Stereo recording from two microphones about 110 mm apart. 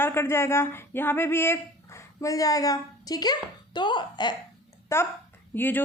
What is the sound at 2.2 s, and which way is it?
A woman's voice, 30° left (ahead or behind).